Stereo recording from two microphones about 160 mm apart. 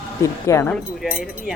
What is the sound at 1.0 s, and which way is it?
Speech, 5° right (ahead or behind).